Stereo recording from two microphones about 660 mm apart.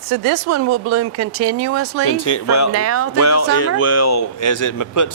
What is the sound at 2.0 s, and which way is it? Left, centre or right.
Speech, left.